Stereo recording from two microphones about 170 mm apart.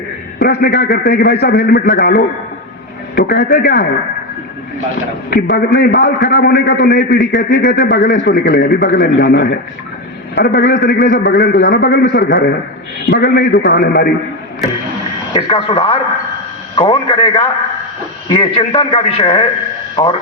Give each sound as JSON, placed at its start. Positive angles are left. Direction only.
{"t": 0.3, "sound": "a man's voice", "side_deg": 60}
{"t": 1.8, "sound": "a man's voice", "side_deg": 50}
{"t": 3.2, "sound": "a man's voice", "side_deg": 65}
{"t": 5.3, "sound": "a man's voice", "side_deg": 70}
{"t": 10.3, "sound": "a man's voice", "side_deg": 60}
{"t": 13.1, "sound": "a man's voice", "side_deg": 90}
{"t": 13.6, "sound": "a man's voice", "side_deg": 65}
{"t": 15.3, "sound": "a man's voice", "side_deg": 30}